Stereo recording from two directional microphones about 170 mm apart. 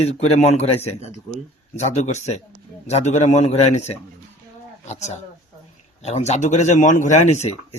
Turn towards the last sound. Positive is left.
turn(degrees=40)  # may be behind; listen again after turning